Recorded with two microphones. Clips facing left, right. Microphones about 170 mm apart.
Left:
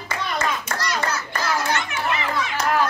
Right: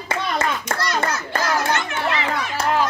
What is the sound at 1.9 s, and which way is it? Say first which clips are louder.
Chatter: right 2 dB; 60° right (ahead or behind).